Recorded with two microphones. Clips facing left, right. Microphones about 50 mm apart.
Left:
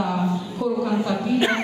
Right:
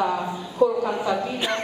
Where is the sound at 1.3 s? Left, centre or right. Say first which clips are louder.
Left 5 dB; left.